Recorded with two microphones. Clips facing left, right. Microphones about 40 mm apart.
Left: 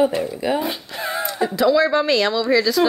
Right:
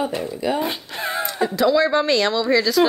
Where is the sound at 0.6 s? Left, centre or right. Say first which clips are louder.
Even; right.